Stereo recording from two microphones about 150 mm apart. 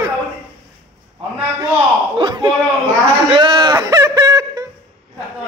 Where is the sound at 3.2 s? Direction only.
30° right (ahead or behind).